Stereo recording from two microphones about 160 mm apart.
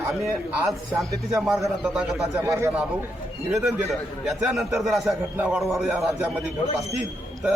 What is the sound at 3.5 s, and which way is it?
A man's voice, 5° right (ahead or behind).